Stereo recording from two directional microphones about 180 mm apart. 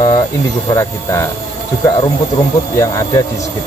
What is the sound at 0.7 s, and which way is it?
Mantra, 15° left (ahead or behind).